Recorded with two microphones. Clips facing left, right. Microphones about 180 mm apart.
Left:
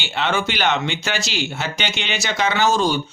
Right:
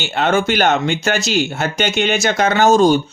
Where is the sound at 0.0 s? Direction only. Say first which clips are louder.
Right 6 dB; 45° right (ahead or behind).